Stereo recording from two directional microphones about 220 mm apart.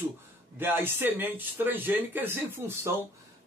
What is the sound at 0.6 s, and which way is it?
Speech, 10° right (ahead or behind).